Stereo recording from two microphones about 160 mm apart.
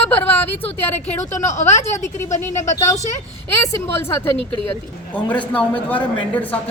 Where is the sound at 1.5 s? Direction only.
45° left (ahead or behind).